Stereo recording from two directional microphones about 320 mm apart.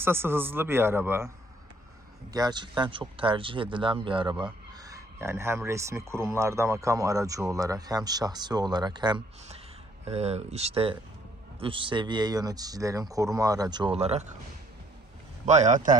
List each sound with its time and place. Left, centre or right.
0.0 s speech: centre
2.3 s speech: centre
15.4 s speech: right